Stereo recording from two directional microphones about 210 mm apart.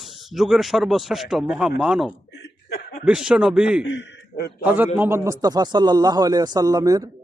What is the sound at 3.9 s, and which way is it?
Speech, 55° left (ahead or behind).